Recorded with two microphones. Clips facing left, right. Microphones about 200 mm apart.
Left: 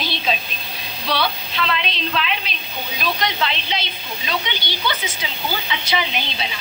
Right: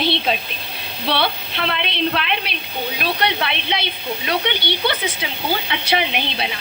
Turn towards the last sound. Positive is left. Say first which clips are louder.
# right 3 dB
turn(degrees=-60)  # may be behind; listen again after turning